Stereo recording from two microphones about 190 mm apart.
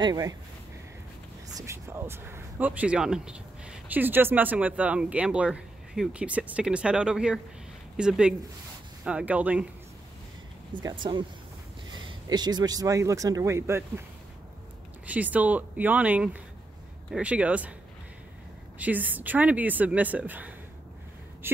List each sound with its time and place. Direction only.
0.0 s speech: 20° right (ahead or behind)
1.7 s speech: 15° right (ahead or behind)
10.7 s speech: 25° right (ahead or behind)
15.0 s speech: 10° right (ahead or behind)
18.8 s speech: 10° right (ahead or behind)